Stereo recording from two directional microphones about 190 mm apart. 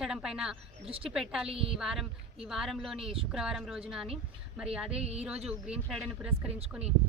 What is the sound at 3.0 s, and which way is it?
Speech, 30° right (ahead or behind).